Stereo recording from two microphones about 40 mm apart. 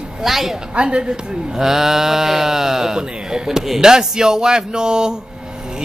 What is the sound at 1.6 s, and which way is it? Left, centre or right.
A man's voice, centre.